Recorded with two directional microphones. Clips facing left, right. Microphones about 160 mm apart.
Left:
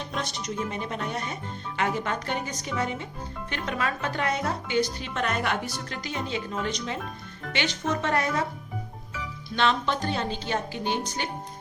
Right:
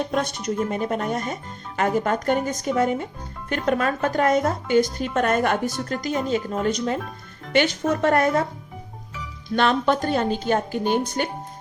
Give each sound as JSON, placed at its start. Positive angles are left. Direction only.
{"t": 0.0, "sound": "speech", "side_deg": -50}
{"t": 9.6, "sound": "speech", "side_deg": -50}